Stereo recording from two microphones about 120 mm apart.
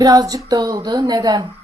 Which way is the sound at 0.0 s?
30° right (ahead or behind).